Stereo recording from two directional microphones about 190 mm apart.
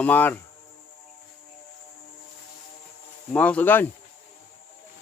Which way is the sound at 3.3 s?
5° left (ahead or behind).